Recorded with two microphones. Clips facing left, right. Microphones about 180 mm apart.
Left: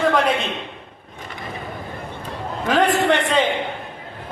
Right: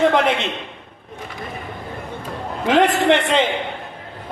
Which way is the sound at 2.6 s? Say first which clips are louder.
Right 2 dB; 25° right (ahead or behind).